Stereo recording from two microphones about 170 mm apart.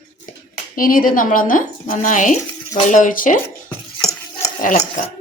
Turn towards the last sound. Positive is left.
turn(degrees=50)  # may be behind; listen again after turning